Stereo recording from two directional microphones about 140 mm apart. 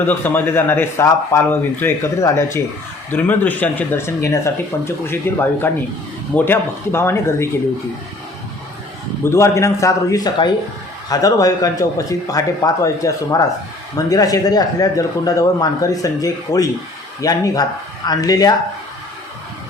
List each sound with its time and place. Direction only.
0.0 s speech: 15° left (ahead or behind)
9.2 s speech: 20° left (ahead or behind)